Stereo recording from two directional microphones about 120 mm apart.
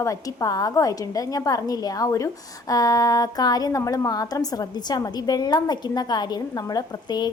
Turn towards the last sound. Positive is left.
turn(degrees=35)  # may be behind; listen again after turning